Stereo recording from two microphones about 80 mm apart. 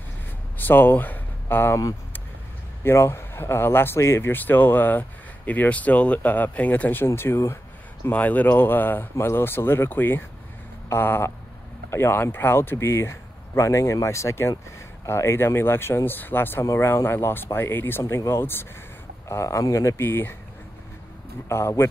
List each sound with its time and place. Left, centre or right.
0.6 s speech: left
2.8 s a man's voice: left
7.1 s speech: left
8.1 s a man's voice: left
19.2 s speech: left
20.0 s a man's voice: left
21.5 s speech: left